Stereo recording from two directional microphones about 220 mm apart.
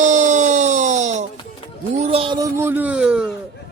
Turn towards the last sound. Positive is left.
turn(degrees=-5)  # may be behind; listen again after turning